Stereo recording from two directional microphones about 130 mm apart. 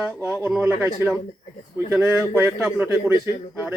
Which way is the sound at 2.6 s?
5° right (ahead or behind).